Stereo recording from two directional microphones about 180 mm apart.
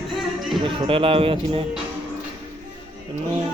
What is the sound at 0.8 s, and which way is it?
Speech, 30° right (ahead or behind).